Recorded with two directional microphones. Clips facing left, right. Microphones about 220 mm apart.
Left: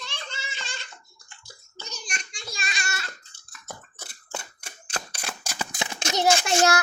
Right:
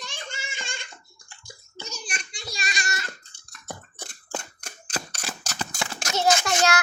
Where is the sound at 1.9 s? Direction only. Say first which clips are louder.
Right 1 dB; 40° left (ahead or behind).